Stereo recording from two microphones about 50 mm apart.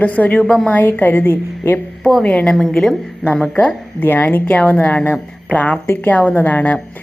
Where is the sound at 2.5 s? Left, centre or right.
Centre.